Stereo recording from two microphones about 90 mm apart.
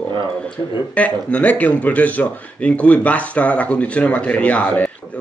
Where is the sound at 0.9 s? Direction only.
15° left (ahead or behind).